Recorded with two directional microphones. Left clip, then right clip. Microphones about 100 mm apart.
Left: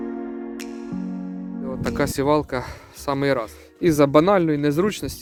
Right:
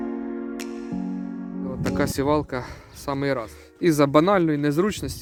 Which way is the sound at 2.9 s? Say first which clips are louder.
Left 4 dB; 35° left (ahead or behind).